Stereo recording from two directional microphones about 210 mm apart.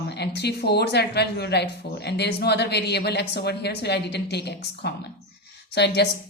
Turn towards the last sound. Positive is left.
turn(degrees=55)  # may be behind; listen again after turning